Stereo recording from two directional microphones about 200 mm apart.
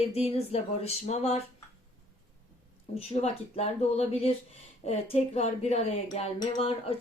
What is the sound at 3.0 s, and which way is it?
Speech, 30° left (ahead or behind).